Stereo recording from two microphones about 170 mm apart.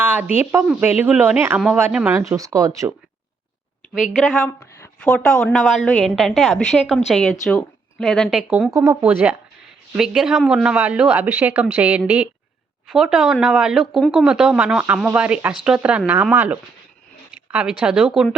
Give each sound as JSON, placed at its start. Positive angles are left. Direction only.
{"t": 0.0, "sound": "speech", "side_deg": -10}
{"t": 2.1, "sound": "speech", "side_deg": -20}
{"t": 3.9, "sound": "a woman's voice", "side_deg": -5}